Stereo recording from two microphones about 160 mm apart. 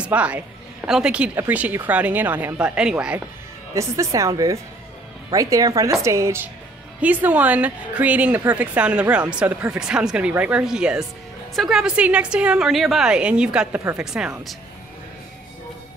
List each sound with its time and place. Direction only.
0.0 s a woman's voice: 10° right (ahead or behind)
3.7 s a woman's voice: 20° right (ahead or behind); by 14.6 s centre (ahead or behind)